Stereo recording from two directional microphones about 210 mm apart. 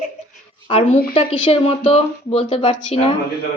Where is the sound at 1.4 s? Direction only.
25° left (ahead or behind).